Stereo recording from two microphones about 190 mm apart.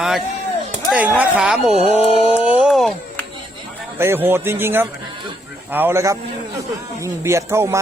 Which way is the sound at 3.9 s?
10° right (ahead or behind).